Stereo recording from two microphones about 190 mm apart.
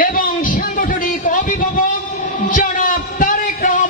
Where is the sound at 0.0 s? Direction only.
45° left (ahead or behind).